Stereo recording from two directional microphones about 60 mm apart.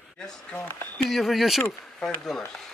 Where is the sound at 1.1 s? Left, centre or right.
Centre.